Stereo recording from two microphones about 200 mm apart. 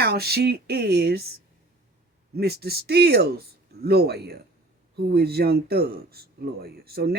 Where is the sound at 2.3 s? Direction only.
50° right (ahead or behind).